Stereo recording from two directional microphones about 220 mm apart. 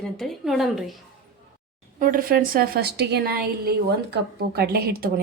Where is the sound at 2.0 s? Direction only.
40° right (ahead or behind).